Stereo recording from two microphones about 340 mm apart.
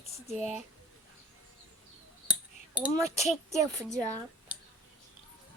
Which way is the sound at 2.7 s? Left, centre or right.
Centre.